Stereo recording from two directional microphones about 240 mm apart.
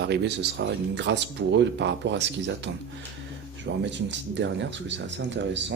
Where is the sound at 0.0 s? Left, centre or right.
Right.